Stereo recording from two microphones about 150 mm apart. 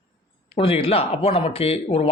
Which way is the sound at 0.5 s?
40° left (ahead or behind).